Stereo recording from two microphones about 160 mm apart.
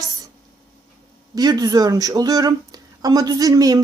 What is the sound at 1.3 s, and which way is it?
Speech, 25° right (ahead or behind).